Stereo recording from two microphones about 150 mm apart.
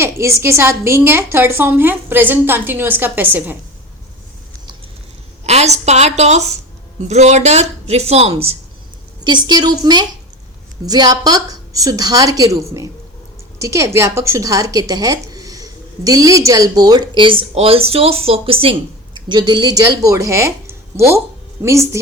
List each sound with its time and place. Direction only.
0.0 s a woman's voice: 20° right (ahead or behind)
5.5 s speech: 45° right (ahead or behind)
9.2 s a woman's voice: 30° right (ahead or behind)